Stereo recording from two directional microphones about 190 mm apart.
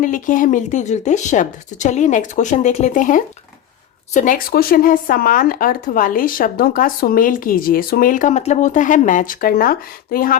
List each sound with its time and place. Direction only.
0.0 s a woman's voice: 45° left (ahead or behind)